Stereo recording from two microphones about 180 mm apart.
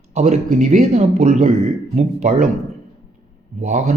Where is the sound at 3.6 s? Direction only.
40° right (ahead or behind).